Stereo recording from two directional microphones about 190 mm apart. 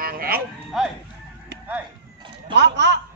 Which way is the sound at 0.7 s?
Centre (ahead or behind).